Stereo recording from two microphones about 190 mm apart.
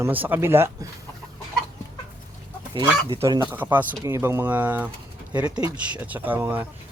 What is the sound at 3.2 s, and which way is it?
Speech, 20° right (ahead or behind).